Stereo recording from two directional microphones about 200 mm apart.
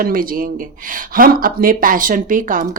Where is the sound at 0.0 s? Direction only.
45° right (ahead or behind).